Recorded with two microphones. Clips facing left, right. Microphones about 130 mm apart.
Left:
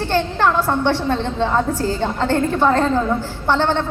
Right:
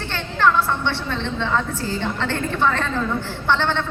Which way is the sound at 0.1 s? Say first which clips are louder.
Left 1 dB; 40° left (ahead or behind).